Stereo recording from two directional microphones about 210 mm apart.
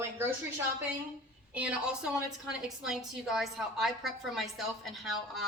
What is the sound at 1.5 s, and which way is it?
A woman's voice, 5° right (ahead or behind).